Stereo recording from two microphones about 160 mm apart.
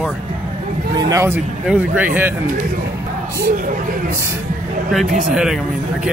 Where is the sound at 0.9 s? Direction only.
20° right (ahead or behind).